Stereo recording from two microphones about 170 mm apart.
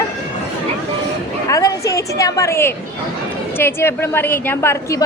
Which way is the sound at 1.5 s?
20° left (ahead or behind).